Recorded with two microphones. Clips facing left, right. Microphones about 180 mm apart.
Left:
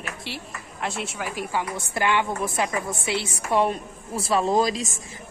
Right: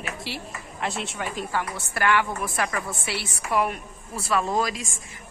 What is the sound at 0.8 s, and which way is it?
Speech, centre (ahead or behind).